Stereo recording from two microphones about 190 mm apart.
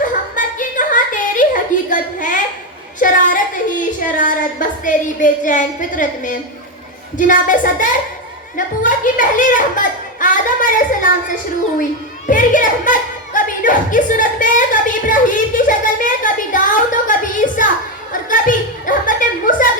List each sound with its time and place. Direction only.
0.0 s a sound: 45° left (ahead or behind)
4.8 s a woman's voice: 45° left (ahead or behind)
12.3 s a woman's voice: 45° left (ahead or behind)